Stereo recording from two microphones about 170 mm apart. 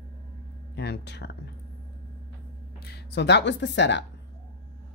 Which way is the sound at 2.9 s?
85° left.